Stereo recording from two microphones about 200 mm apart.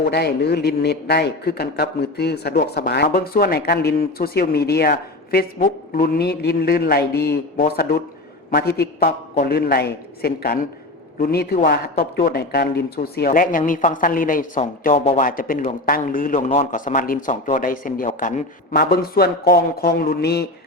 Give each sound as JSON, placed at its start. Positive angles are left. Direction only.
{"t": 0.1, "sound": "a man's voice", "side_deg": 55}
{"t": 14.8, "sound": "speech", "side_deg": 30}
{"t": 15.2, "sound": "a man's voice", "side_deg": 45}